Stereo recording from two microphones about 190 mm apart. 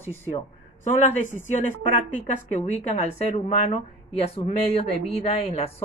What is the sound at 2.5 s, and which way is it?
Speech, 40° left (ahead or behind).